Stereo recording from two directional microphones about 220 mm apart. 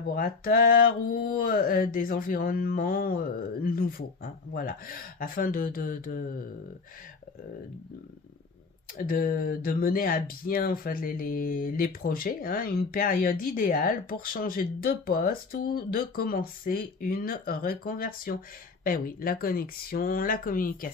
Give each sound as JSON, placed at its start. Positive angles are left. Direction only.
{"t": 0.1, "sound": "speech", "side_deg": 40}
{"t": 8.9, "sound": "speech", "side_deg": 40}